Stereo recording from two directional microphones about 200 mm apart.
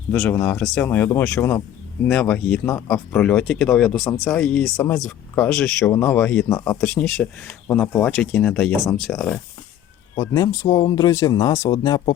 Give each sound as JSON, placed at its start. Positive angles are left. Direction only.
{"t": 0.1, "sound": "speech", "side_deg": 5}
{"t": 10.2, "sound": "speech", "side_deg": 20}